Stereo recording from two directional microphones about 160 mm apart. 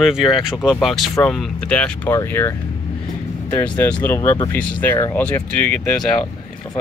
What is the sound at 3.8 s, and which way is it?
Speech, 10° left (ahead or behind).